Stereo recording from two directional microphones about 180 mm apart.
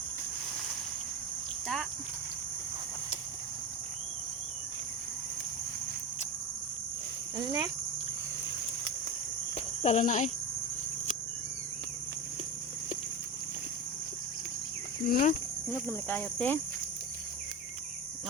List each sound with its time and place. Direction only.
1.6 s a sound: centre (ahead or behind)
7.3 s speech: 20° right (ahead or behind)
9.6 s speech: 40° left (ahead or behind)
15.0 s speech: 50° left (ahead or behind)
15.7 s speech: 10° left (ahead or behind)